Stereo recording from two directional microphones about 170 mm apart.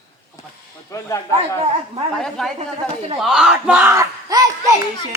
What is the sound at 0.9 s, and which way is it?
Speech, 15° left (ahead or behind).